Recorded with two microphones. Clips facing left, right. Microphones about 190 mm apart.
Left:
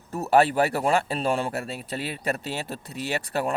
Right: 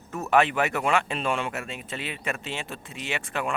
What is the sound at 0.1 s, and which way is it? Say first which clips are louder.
Speech: left 2 dB; 35° left (ahead or behind).